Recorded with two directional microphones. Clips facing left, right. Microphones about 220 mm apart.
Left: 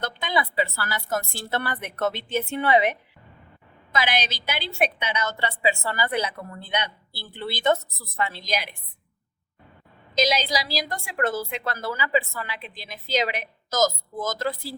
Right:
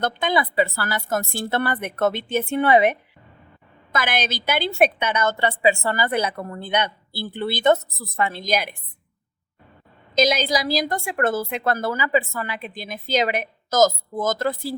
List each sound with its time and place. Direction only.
0.0 s a woman's voice: 50° right (ahead or behind)
10.2 s a woman's voice: 50° right (ahead or behind)